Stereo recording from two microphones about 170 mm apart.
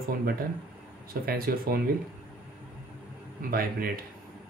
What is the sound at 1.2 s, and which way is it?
Speech, 60° right (ahead or behind).